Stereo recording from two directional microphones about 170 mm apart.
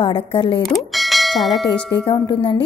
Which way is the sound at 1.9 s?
25° left (ahead or behind).